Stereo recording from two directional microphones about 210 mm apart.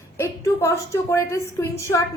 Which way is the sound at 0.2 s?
10° left (ahead or behind).